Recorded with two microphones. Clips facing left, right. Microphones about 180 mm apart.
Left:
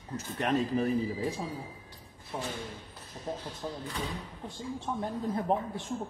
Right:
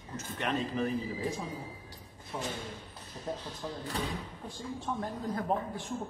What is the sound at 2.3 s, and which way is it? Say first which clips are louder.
Speech: left 1 dB; 20° left (ahead or behind).